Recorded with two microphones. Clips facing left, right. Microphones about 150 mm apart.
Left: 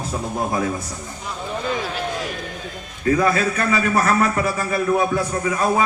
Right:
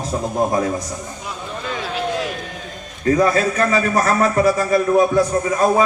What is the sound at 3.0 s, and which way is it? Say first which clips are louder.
A man's voice: right 2 dB; 35° right (ahead or behind).